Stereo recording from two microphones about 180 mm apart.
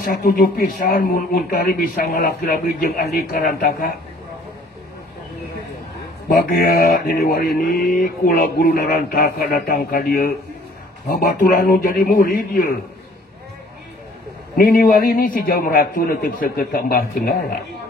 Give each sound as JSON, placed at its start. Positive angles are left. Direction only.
{"t": 0.0, "sound": "speech", "side_deg": 55}
{"t": 6.2, "sound": "a man's voice", "side_deg": 50}
{"t": 14.6, "sound": "speech", "side_deg": 55}